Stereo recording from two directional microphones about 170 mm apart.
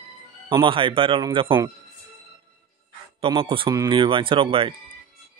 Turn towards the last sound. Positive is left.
turn(degrees=-30)  # may be behind; listen again after turning